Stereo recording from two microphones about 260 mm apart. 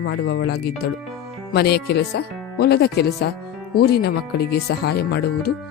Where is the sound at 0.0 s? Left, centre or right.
Left.